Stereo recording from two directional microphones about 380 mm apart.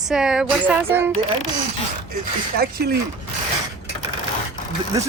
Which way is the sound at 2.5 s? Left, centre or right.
Right.